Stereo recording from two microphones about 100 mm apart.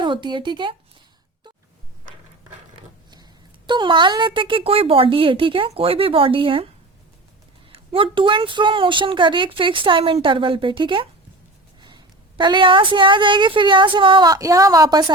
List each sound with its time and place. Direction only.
0.0 s speech: 50° right (ahead or behind)
3.7 s a woman's voice: 50° right (ahead or behind)
7.7 s a woman's voice: 60° right (ahead or behind)
14.3 s a woman's voice: 35° right (ahead or behind)